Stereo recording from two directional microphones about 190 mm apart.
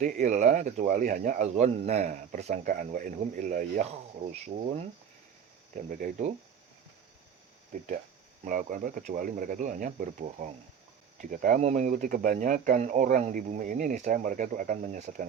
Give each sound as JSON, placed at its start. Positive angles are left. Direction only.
{"t": 0.0, "sound": "speech", "side_deg": -40}
{"t": 5.7, "sound": "speech", "side_deg": -45}
{"t": 8.4, "sound": "speech", "side_deg": -45}